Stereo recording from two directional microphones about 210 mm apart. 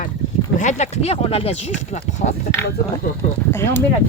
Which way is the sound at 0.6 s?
35° left (ahead or behind).